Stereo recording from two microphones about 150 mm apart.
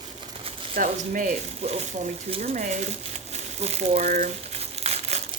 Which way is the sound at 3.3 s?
50° right (ahead or behind).